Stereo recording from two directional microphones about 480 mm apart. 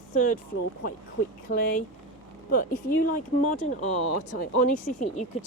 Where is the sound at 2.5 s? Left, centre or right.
Centre.